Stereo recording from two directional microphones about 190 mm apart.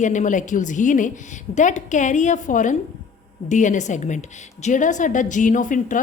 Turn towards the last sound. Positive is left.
turn(degrees=45)  # may be behind; listen again after turning